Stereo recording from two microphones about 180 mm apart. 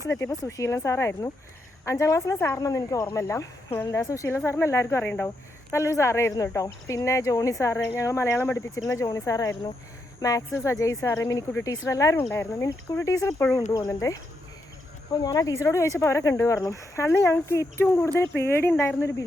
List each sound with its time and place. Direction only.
0.1 s a woman's voice: 15° left (ahead or behind)